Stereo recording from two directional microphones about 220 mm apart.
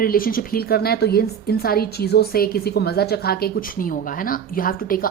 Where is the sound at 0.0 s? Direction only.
40° left (ahead or behind).